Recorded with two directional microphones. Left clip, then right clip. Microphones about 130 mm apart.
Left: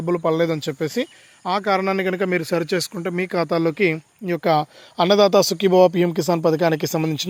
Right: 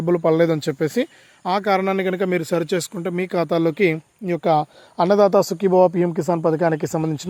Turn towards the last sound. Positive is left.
turn(degrees=5)  # may be behind; listen again after turning